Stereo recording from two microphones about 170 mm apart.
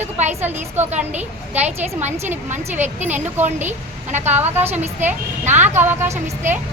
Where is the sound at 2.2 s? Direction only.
45° right (ahead or behind).